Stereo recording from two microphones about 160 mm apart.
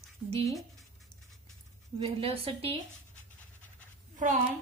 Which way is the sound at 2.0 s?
35° right (ahead or behind).